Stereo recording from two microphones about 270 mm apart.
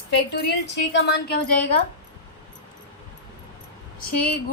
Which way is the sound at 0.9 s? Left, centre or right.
Left.